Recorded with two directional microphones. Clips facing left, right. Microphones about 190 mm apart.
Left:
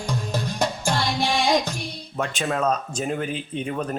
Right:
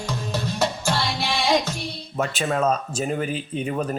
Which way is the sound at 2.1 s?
5° right (ahead or behind).